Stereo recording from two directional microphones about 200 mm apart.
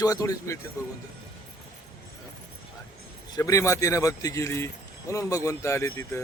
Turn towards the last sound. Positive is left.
turn(degrees=15)  # may be behind; listen again after turning